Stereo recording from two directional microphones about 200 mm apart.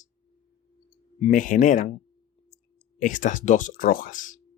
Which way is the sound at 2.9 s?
40° left (ahead or behind).